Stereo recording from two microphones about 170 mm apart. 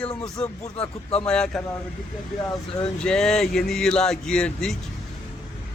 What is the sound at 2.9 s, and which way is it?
Speech, 5° left (ahead or behind).